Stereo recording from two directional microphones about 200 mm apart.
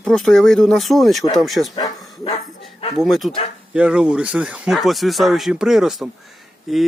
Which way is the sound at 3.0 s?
Centre (ahead or behind).